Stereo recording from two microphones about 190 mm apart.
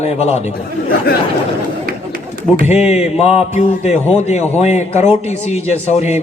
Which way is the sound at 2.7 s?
35° left (ahead or behind).